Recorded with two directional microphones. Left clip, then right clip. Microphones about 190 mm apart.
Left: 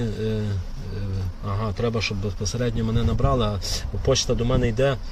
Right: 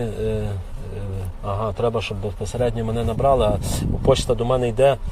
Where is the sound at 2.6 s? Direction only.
35° left (ahead or behind).